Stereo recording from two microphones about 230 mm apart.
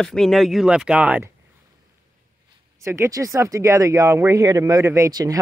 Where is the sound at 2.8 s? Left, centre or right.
Centre.